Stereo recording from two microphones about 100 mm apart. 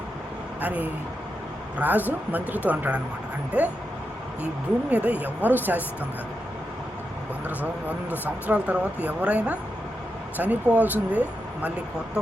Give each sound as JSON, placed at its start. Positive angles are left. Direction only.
{"t": 0.6, "sound": "speech", "side_deg": -15}
{"t": 4.9, "sound": "speech", "side_deg": -15}
{"t": 7.4, "sound": "speech", "side_deg": -15}